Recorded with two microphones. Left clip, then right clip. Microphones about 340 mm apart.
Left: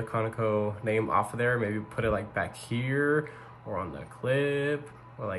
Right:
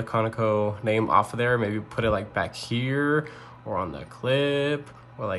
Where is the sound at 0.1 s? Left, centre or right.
Centre.